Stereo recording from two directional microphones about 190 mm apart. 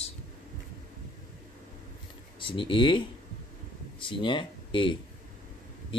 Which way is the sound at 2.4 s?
25° left (ahead or behind).